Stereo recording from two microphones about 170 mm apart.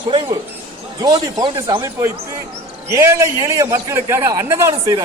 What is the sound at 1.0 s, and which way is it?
Speech, 20° right (ahead or behind).